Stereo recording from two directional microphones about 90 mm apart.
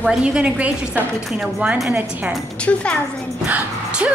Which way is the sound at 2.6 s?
10° left (ahead or behind).